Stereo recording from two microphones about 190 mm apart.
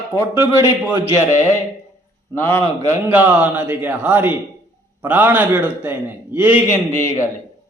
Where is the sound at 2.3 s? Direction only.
10° left (ahead or behind).